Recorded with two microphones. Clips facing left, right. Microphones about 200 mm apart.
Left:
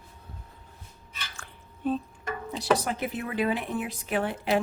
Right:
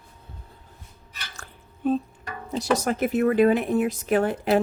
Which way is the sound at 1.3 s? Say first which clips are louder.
Right 2 dB; 40° right (ahead or behind).